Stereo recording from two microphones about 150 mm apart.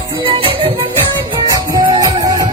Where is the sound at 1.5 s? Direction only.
25° right (ahead or behind).